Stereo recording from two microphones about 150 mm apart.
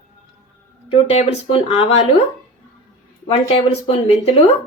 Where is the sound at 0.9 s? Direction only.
40° left (ahead or behind).